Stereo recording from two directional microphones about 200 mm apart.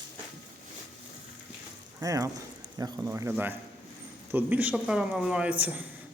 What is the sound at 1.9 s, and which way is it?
Speech, 15° right (ahead or behind).